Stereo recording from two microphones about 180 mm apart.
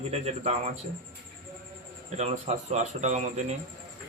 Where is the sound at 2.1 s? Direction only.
40° right (ahead or behind).